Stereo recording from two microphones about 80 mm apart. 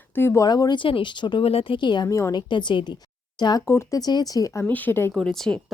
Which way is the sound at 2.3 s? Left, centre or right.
Left.